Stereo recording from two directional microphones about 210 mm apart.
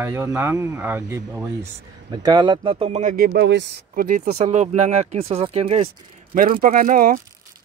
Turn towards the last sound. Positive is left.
turn(degrees=-40)  # may be behind; listen again after turning